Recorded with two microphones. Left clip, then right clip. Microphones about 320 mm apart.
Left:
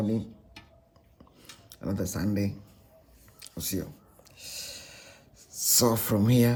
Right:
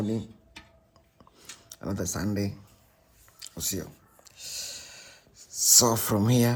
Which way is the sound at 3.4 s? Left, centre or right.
Centre.